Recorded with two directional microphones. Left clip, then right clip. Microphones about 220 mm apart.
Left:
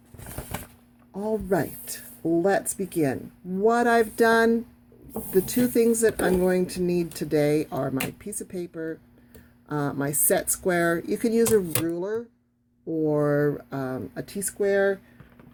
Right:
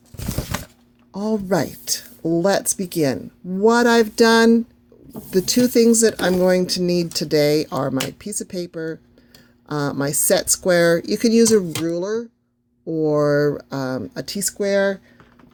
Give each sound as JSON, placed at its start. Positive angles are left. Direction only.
{"t": 1.1, "sound": "speech", "side_deg": -35}